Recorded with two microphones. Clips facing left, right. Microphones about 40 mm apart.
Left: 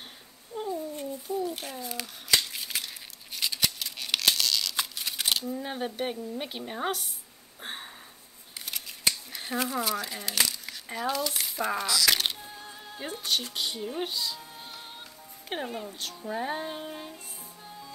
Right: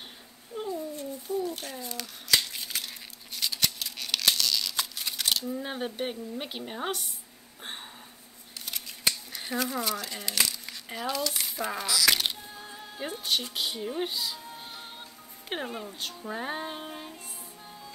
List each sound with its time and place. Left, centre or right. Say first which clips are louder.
0.5 s babbling: left 1 dB; right
1.3 s crumpling: right 1 dB; centre
5.1 s a sound: even; centre
5.5 s a woman's voice: even; centre
7.6 s a sound: left 2 dB; centre
8.5 s scissors: even; centre
9.6 s speech: left 1 dB; centre